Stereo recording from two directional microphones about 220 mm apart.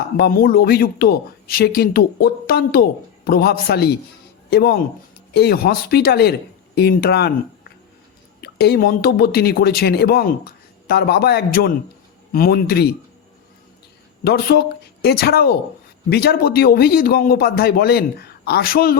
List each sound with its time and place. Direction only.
0.2 s speech: 45° left (ahead or behind)
8.4 s speech: 45° left (ahead or behind)
14.3 s speech: 45° left (ahead or behind)